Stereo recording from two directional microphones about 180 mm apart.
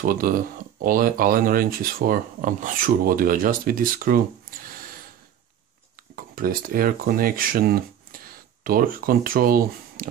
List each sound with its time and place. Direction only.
0.0 s speech: 50° right (ahead or behind)
4.5 s a sound: 50° right (ahead or behind)
6.1 s speech: 55° right (ahead or behind)